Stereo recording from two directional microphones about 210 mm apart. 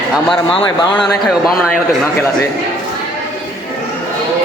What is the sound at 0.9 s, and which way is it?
Speech, centre (ahead or behind).